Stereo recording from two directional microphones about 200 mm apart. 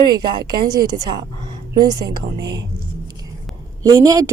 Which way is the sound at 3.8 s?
15° right (ahead or behind).